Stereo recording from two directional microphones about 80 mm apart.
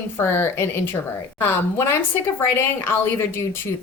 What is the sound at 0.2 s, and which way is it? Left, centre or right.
Speech, left.